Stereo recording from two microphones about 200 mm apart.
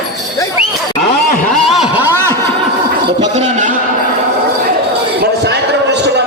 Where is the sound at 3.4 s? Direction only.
35° right (ahead or behind).